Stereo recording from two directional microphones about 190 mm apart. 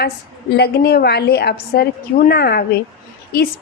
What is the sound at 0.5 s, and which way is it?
Speech, 60° left (ahead or behind).